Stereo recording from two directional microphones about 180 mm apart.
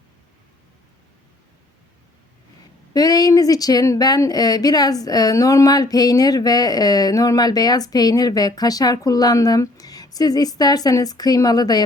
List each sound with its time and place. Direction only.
2.9 s speech: 20° left (ahead or behind)